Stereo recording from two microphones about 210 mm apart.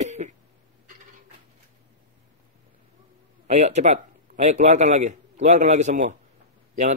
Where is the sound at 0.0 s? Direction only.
35° right (ahead or behind).